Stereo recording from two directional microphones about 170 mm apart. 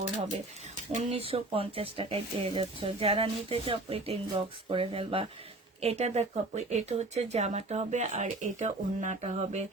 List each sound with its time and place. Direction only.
0.9 s speech: 35° right (ahead or behind)